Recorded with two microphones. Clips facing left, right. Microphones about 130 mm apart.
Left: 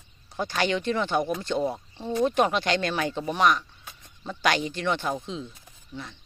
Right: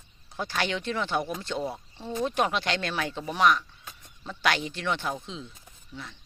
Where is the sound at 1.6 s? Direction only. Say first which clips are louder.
Left 5 dB; 15° left (ahead or behind).